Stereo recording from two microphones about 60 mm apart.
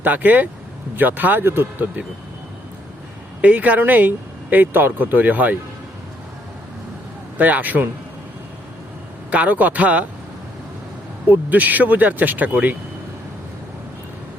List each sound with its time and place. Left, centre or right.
0.0 s speech: right
3.4 s speech: right
7.3 s speech: right
9.3 s speech: right
11.3 s speech: right